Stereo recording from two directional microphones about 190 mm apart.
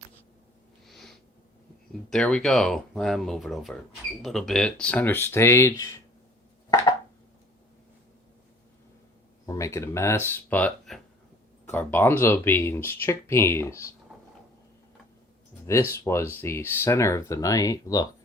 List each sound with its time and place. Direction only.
0.9 s a sound: centre (ahead or behind)
2.0 s speech: 5° left (ahead or behind)
9.5 s speech: 15° left (ahead or behind)
15.9 s speech: 15° left (ahead or behind)